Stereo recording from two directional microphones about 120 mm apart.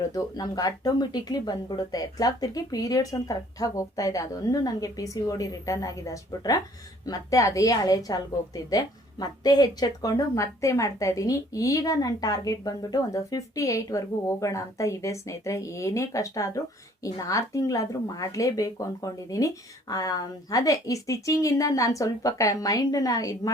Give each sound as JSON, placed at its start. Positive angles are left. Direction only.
{"t": 0.0, "sound": "a woman's voice", "side_deg": 30}